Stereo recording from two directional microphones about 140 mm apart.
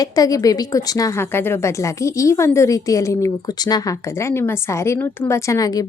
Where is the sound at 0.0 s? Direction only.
25° left (ahead or behind).